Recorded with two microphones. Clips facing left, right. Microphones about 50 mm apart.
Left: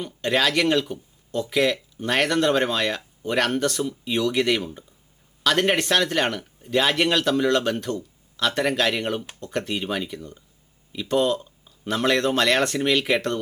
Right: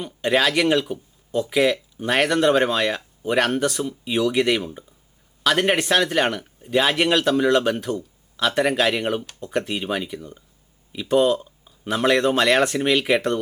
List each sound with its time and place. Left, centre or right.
0.0 s speech: centre